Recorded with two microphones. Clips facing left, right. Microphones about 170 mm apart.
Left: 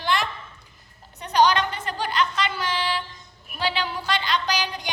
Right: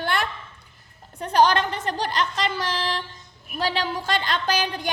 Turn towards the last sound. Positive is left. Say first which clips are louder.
# right 1 dB
turn(degrees=-55)  # may be behind; listen again after turning